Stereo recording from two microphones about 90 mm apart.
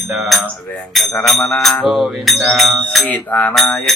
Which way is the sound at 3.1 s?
20° left (ahead or behind).